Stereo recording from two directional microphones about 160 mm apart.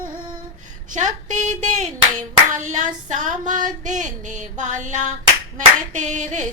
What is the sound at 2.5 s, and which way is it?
Child singing, 50° right (ahead or behind).